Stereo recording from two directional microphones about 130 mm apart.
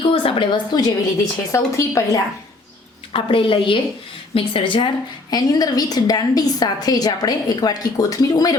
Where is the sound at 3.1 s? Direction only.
40° left (ahead or behind).